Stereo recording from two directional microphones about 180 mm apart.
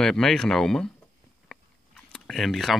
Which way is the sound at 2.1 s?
Centre (ahead or behind).